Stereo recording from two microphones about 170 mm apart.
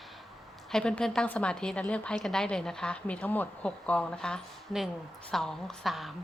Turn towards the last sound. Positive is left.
turn(degrees=0)  # may be behind; listen again after turning